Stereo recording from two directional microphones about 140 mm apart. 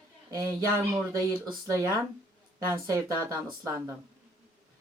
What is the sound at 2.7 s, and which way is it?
A woman's voice, 20° right (ahead or behind).